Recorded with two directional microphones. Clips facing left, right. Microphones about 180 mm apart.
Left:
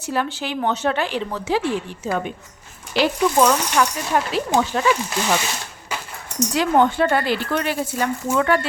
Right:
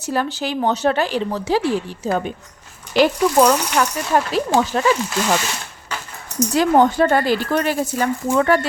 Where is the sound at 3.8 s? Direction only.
40° right (ahead or behind).